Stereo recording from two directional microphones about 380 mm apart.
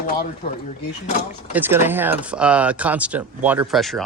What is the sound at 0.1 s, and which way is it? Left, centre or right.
Speech, centre.